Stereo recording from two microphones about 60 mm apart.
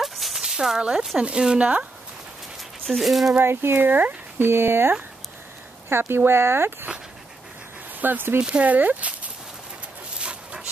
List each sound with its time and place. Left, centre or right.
0.0 s a sound: centre
1.2 s speech: centre
2.9 s speech: centre
3.3 s speech: right
8.0 s speech: right
8.4 s speech: centre
10.1 s dog: centre